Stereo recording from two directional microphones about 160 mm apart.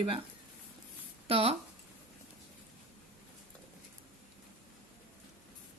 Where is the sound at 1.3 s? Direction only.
35° right (ahead or behind).